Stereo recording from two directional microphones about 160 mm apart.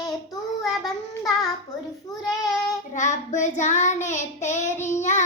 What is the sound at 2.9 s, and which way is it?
Child singing, 50° left (ahead or behind).